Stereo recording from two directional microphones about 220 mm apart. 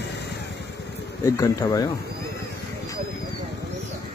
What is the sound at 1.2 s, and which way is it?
Speech, 15° left (ahead or behind).